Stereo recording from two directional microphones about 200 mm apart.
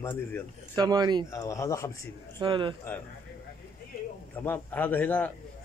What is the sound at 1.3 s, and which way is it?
Speech, 15° left (ahead or behind).